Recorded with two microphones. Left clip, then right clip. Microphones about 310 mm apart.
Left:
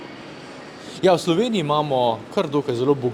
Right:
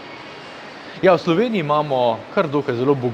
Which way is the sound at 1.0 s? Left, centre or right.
Centre.